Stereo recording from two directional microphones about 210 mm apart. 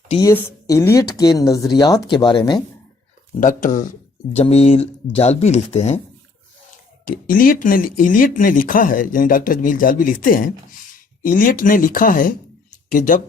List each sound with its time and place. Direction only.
0.2 s speech: 15° left (ahead or behind)
3.4 s speech: 40° left (ahead or behind)
7.3 s speech: 40° left (ahead or behind)